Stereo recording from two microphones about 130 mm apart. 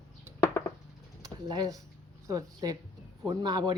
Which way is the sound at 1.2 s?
30° right (ahead or behind).